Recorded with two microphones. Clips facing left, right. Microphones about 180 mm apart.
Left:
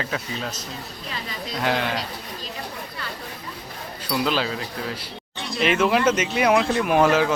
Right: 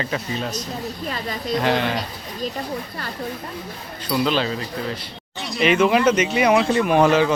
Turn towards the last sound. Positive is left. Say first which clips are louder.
# right 2 dB
turn(degrees=5)  # may be behind; listen again after turning